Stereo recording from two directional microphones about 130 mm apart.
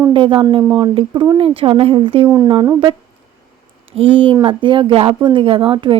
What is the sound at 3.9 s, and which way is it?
Speech, 45° right (ahead or behind).